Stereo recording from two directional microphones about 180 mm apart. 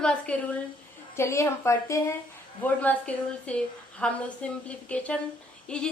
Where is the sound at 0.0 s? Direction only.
5° left (ahead or behind).